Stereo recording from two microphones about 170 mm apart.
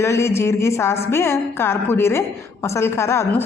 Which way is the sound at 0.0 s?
15° left (ahead or behind).